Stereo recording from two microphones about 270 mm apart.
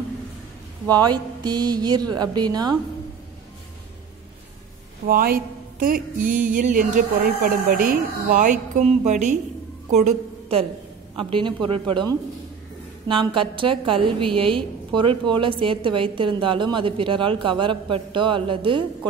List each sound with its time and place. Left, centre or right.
0.8 s speech: centre
5.0 s a woman's voice: right
13.1 s a woman's voice: centre